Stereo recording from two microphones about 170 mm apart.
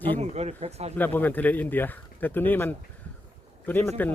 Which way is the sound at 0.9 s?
10° left (ahead or behind).